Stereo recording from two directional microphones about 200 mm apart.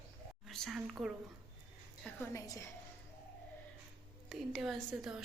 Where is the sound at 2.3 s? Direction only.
15° left (ahead or behind).